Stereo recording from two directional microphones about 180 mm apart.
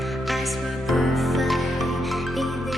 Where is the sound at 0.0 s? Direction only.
Centre (ahead or behind).